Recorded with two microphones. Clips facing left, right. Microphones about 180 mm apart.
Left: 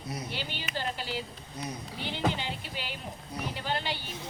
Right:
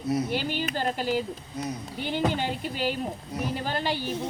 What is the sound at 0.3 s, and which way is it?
A woman's voice, 45° right (ahead or behind).